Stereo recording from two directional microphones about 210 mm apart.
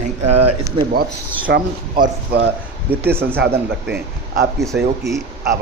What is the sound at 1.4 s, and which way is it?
Speech, 40° right (ahead or behind).